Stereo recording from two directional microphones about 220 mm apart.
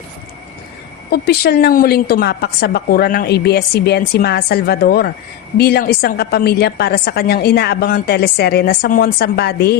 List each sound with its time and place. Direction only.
1.1 s a woman's voice: 45° left (ahead or behind)